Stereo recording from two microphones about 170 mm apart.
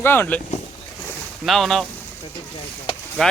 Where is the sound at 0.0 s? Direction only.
10° left (ahead or behind).